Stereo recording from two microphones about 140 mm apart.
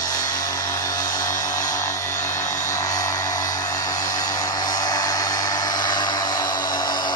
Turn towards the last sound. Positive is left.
turn(degrees=30)  # may be behind; listen again after turning